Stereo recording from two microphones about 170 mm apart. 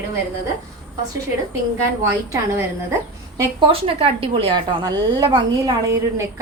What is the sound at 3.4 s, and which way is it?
A woman's voice, 30° right (ahead or behind).